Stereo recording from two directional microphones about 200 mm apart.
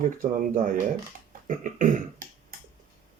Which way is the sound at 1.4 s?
40° right (ahead or behind).